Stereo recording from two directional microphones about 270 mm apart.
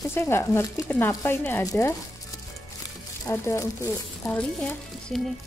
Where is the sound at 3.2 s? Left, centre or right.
Centre.